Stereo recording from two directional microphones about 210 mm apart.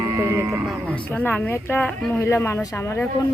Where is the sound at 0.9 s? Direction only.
5° left (ahead or behind).